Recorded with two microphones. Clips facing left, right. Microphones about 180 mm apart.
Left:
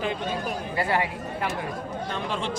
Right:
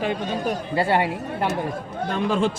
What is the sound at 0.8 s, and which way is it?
Speech, 30° right (ahead or behind).